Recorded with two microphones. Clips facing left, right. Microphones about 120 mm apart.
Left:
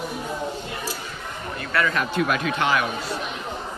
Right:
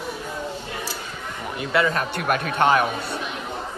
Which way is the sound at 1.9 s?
45° right (ahead or behind).